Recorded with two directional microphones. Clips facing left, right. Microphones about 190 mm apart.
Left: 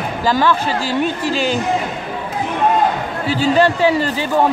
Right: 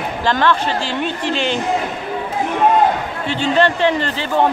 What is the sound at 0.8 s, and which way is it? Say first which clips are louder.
Speech: left 3 dB; 40° left (ahead or behind).